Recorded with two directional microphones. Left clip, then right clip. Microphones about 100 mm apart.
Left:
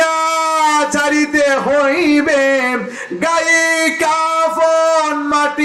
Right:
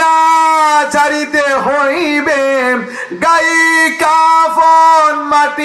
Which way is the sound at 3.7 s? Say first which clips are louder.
Right 4 dB; 30° right (ahead or behind).